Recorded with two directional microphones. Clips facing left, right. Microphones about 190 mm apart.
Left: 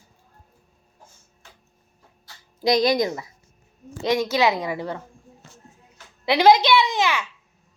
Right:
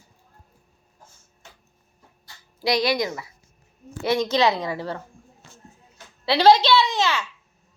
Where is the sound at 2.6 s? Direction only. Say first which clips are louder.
Left 3 dB; 45° left (ahead or behind).